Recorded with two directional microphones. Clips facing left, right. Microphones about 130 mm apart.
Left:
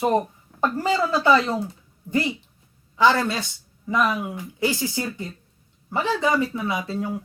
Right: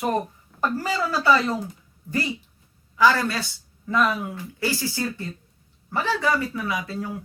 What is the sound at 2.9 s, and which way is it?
Speech, 25° left (ahead or behind).